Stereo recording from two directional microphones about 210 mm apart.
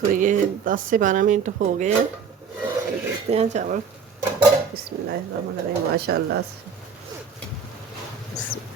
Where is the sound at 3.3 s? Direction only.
30° right (ahead or behind).